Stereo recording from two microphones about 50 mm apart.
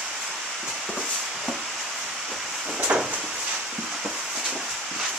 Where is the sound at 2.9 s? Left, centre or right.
Centre.